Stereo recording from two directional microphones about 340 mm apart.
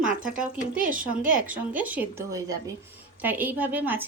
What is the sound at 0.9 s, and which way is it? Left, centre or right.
Speech, right.